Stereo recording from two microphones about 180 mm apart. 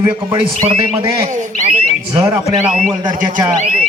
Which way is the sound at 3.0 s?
25° right (ahead or behind).